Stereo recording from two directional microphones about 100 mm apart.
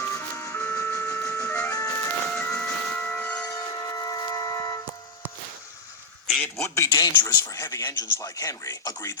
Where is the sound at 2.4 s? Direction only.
15° left (ahead or behind).